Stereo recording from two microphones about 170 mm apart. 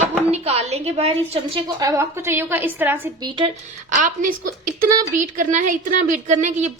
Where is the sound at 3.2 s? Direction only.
30° right (ahead or behind).